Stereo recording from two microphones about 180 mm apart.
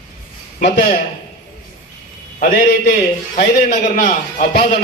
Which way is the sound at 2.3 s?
60° left (ahead or behind).